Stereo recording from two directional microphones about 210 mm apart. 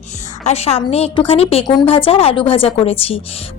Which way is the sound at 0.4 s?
30° left (ahead or behind).